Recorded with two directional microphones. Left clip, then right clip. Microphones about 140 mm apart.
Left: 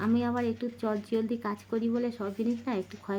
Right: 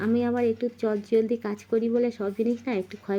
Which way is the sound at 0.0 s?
10° right (ahead or behind).